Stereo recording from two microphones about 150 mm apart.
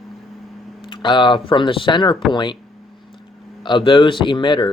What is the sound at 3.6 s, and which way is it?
Speech, 30° left (ahead or behind).